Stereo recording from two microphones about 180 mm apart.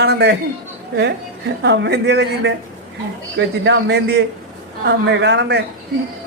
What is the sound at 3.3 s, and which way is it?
Speech, 80° right.